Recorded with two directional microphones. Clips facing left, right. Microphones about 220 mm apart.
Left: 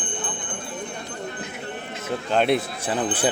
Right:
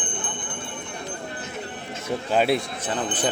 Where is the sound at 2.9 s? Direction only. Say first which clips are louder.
Left 3 dB; 10° left (ahead or behind).